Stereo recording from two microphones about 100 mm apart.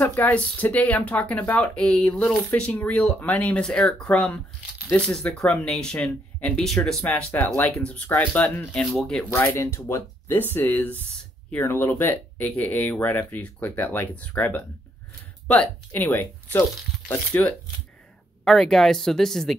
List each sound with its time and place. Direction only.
0.0 s speech: 15° left (ahead or behind)
7.0 s speech: 15° left (ahead or behind)
9.3 s speech: 25° left (ahead or behind)
18.4 s speech: 5° left (ahead or behind)